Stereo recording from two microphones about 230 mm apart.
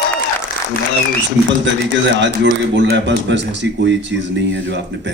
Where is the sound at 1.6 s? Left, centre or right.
Right.